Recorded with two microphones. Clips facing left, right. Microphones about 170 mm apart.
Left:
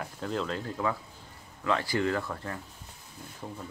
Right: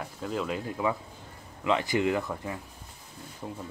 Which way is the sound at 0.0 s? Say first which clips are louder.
Even; 5° right (ahead or behind).